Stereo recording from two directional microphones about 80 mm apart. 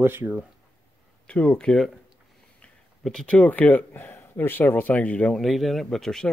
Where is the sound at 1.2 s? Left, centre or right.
Centre.